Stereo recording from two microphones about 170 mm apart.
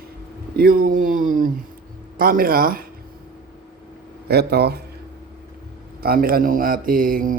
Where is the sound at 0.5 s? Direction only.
60° right (ahead or behind).